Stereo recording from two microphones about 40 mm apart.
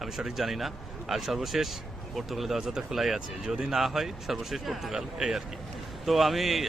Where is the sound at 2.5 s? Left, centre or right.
Centre.